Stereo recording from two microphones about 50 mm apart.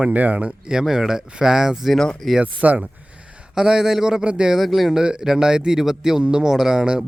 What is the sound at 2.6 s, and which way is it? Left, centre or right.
Speech, right.